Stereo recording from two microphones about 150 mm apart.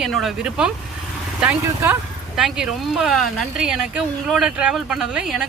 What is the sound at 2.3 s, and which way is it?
Speech, 5° right (ahead or behind).